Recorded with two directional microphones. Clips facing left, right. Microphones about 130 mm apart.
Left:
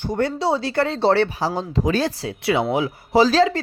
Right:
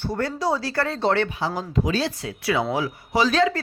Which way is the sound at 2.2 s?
25° left (ahead or behind).